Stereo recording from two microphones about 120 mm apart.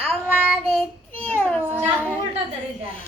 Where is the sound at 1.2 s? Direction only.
15° left (ahead or behind).